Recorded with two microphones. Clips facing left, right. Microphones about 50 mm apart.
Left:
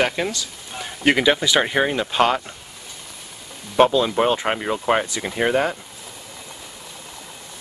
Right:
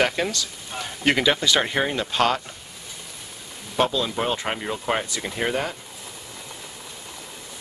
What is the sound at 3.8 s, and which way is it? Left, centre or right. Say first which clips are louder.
Speech: left 7 dB; centre.